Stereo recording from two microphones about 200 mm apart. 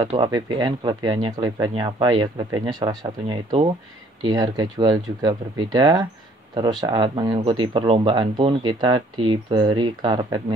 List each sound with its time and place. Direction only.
0.1 s speech: 25° right (ahead or behind)